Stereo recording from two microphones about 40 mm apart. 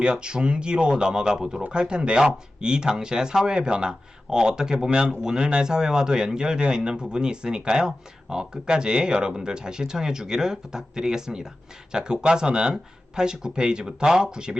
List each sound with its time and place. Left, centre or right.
0.0 s speech: right